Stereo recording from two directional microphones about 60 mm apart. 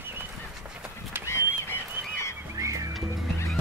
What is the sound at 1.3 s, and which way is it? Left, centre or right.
Goose, left.